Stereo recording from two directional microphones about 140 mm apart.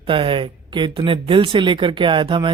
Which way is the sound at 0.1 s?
40° right (ahead or behind).